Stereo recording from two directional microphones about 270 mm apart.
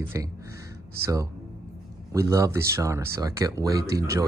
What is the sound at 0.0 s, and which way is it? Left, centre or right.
Speech, centre.